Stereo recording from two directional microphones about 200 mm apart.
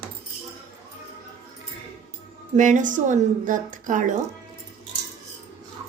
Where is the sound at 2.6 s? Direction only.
40° right (ahead or behind).